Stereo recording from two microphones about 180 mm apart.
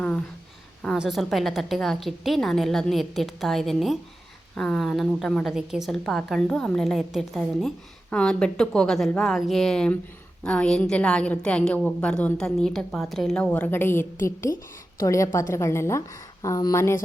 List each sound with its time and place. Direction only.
0.8 s a woman's voice: centre (ahead or behind)